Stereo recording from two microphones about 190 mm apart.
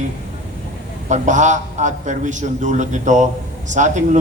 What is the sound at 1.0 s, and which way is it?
A man's voice, 40° right (ahead or behind).